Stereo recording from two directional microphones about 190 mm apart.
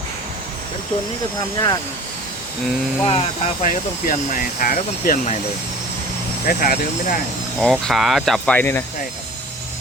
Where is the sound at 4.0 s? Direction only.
50° left (ahead or behind).